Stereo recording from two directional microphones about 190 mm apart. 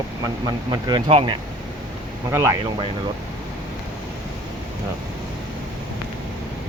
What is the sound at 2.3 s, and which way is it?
Speech, 15° right (ahead or behind).